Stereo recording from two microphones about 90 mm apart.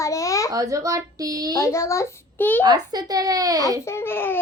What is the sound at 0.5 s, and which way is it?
Speech, 40° right (ahead or behind).